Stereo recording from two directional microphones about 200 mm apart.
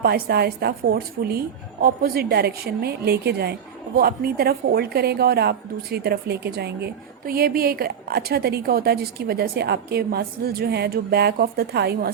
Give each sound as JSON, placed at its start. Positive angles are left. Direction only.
{"t": 0.0, "sound": "speech", "side_deg": -50}